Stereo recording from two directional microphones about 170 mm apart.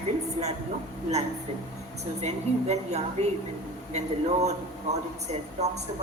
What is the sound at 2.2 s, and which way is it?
A woman's voice, 40° right (ahead or behind).